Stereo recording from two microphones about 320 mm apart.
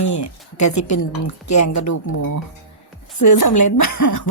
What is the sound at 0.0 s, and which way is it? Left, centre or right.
Speech, left.